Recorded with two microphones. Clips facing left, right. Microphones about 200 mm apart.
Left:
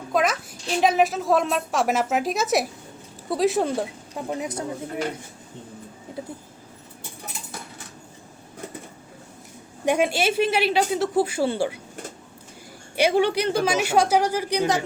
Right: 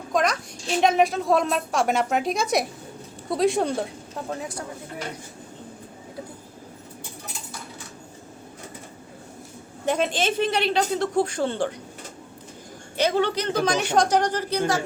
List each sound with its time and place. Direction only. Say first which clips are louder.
0.1 s a sound: left 1 dB; 5° left (ahead or behind)
0.8 s a woman's voice: even; centre (ahead or behind)
4.1 s speech: left 3 dB; 15° left (ahead or behind)
9.8 s speech: left 2 dB; 10° left (ahead or behind)
13.0 s speech: left 3 dB; 10° left (ahead or behind)